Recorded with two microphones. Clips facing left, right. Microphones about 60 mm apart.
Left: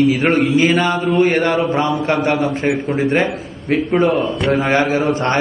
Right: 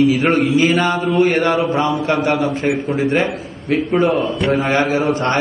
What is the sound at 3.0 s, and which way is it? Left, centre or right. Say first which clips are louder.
Speech: left 1 dB; left.